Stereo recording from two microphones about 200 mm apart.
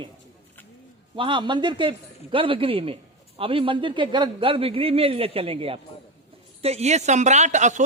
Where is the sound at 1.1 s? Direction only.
25° right (ahead or behind).